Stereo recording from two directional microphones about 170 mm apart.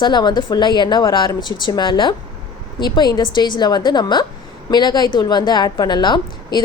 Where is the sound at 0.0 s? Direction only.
25° left (ahead or behind).